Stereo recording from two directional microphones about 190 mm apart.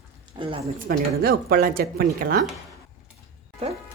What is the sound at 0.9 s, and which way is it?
A woman's voice, 55° right (ahead or behind).